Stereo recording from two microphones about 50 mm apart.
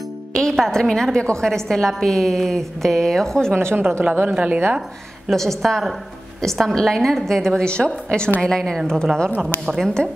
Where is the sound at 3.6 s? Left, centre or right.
Right.